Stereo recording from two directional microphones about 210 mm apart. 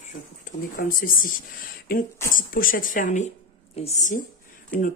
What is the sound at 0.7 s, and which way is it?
Speech, 40° left (ahead or behind).